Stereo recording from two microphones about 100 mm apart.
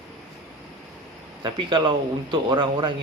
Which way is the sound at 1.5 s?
50° right (ahead or behind).